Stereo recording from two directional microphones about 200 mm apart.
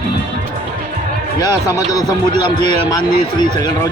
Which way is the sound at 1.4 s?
20° left (ahead or behind).